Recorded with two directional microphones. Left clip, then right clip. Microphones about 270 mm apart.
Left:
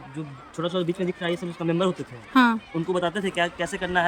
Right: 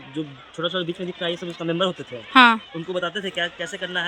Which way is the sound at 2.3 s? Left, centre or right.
Centre.